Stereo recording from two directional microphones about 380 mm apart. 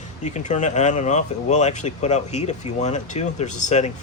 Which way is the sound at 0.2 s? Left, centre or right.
Centre.